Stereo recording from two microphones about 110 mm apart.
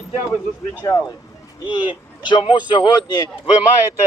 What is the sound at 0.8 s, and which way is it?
Speech, 30° left (ahead or behind).